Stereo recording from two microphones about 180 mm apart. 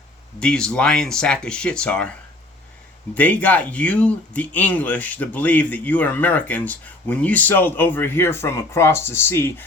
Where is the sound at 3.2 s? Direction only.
10° left (ahead or behind).